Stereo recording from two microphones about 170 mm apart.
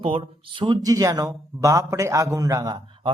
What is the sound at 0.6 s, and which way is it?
A man's voice, 25° right (ahead or behind).